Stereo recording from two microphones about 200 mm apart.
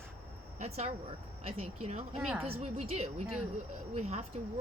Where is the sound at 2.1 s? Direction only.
10° right (ahead or behind).